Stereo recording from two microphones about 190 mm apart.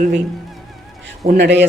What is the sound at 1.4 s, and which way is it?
Speech, 65° right (ahead or behind).